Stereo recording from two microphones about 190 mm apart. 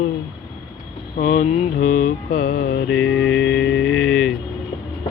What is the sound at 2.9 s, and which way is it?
Mantra, 85° left.